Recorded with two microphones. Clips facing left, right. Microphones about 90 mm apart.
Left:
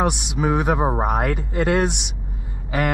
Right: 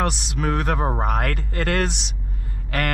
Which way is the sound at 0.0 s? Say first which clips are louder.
Left 3 dB; 5° left (ahead or behind).